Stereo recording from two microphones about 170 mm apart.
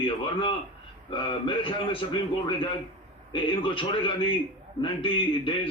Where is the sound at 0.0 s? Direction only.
30° left (ahead or behind).